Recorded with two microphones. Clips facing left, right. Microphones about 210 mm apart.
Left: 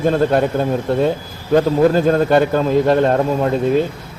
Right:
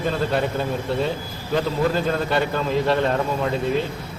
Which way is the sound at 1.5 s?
45° left (ahead or behind).